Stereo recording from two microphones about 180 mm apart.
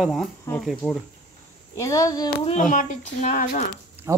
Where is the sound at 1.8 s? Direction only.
15° left (ahead or behind).